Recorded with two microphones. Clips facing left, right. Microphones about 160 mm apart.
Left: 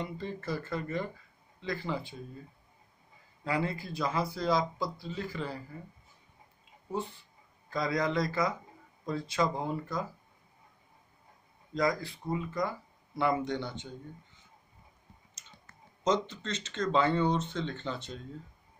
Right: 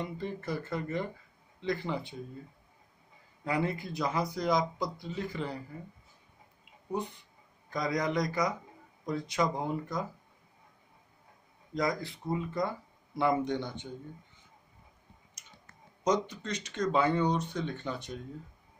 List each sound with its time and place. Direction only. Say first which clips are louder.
0.0 s speech: right 1 dB; 15° right (ahead or behind)
3.4 s speech: right 1 dB; 20° right (ahead or behind)
6.9 s speech: right 1 dB; 15° right (ahead or behind)
11.7 s speech: left 2 dB; 20° right (ahead or behind)
16.1 s speech: even; 15° right (ahead or behind)